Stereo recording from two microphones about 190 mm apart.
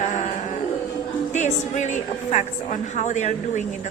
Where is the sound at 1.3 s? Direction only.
40° left (ahead or behind).